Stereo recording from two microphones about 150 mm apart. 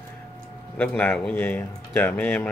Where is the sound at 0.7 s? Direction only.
10° left (ahead or behind).